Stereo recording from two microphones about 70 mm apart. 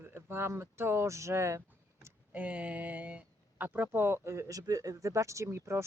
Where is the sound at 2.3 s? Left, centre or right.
Centre.